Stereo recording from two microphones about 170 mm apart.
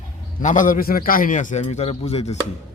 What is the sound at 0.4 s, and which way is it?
A man's voice, 50° left (ahead or behind).